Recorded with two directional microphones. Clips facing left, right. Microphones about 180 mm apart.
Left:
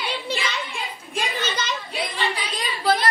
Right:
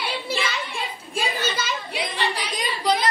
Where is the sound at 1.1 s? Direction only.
10° right (ahead or behind).